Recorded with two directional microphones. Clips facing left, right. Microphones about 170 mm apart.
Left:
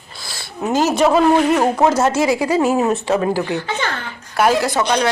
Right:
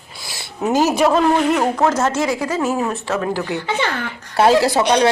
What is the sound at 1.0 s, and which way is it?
Speech, 5° left (ahead or behind).